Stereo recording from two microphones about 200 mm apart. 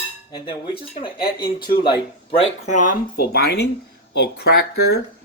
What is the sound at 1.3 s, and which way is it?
Speech, 50° left (ahead or behind).